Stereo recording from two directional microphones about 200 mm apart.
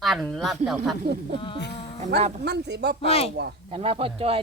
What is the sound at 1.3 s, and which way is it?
Speech, 25° left (ahead or behind).